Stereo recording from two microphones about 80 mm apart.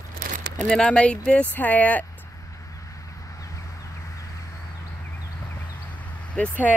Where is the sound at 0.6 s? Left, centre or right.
Centre.